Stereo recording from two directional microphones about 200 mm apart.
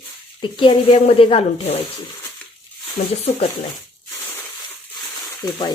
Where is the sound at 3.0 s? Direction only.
40° left (ahead or behind).